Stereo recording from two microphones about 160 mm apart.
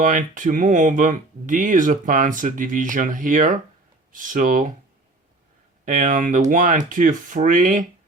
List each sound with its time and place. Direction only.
0.0 s speech: 55° right (ahead or behind)
5.8 s speech: 55° right (ahead or behind)